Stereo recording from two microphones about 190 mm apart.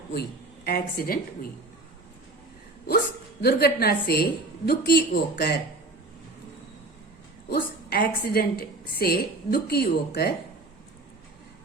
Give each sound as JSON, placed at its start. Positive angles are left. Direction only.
{"t": 0.1, "sound": "a woman's voice", "side_deg": 55}
{"t": 3.4, "sound": "a woman's voice", "side_deg": 55}
{"t": 7.5, "sound": "a woman's voice", "side_deg": 55}